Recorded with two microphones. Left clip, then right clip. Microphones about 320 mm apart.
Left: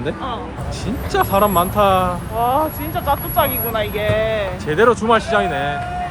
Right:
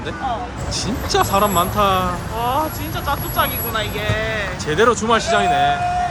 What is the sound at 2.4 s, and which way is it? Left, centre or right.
Speech, left.